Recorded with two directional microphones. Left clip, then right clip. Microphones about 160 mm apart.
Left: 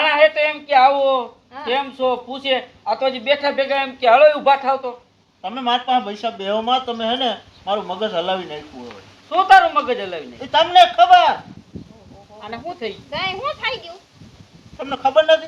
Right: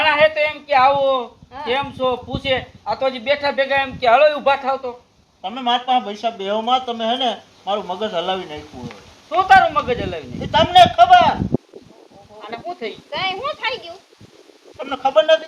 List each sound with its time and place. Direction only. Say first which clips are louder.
0.0 s a man's voice: even; 5° left (ahead or behind)
12.4 s speech: even; centre (ahead or behind)
13.1 s speech: right 1 dB; 20° right (ahead or behind)
14.8 s a man's voice: even; 5° right (ahead or behind)